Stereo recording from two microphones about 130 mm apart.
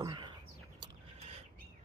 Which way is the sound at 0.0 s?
35° right (ahead or behind).